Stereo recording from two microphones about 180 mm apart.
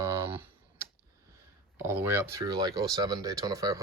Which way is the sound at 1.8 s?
10° right (ahead or behind).